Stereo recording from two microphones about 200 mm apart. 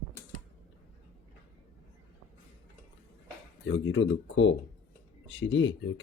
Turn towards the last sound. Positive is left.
turn(degrees=70)  # may be behind; listen again after turning